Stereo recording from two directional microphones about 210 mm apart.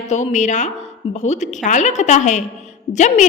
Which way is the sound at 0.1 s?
35° left (ahead or behind).